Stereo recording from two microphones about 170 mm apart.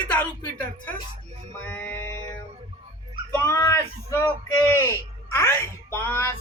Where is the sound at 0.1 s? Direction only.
10° left (ahead or behind).